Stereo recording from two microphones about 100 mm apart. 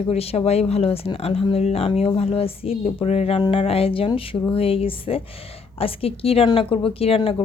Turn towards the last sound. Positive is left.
turn(degrees=70)  # may be behind; listen again after turning